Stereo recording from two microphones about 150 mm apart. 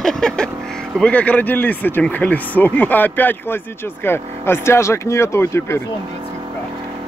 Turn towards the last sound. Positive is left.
turn(degrees=20)  # may be behind; listen again after turning